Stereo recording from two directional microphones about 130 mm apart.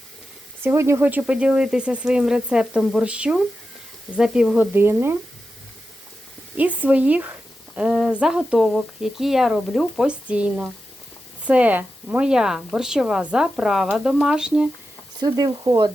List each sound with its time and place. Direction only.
0.6 s speech: 20° right (ahead or behind)
6.6 s a woman's voice: 10° right (ahead or behind)
15.2 s speech: 30° right (ahead or behind)